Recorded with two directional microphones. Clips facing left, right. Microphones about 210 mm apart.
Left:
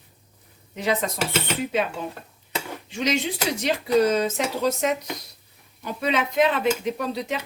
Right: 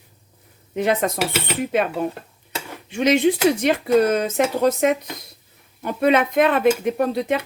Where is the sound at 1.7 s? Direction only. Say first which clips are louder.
Right 5 dB; 55° right (ahead or behind).